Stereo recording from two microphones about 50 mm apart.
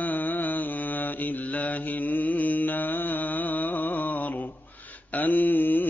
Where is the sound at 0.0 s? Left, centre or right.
Left.